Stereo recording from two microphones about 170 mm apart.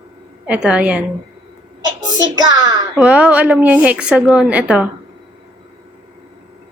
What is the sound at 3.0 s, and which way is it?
A child's voice, 5° right (ahead or behind).